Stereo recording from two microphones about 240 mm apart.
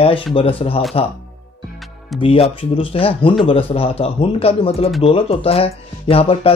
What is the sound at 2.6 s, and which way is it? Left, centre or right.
Speech, left.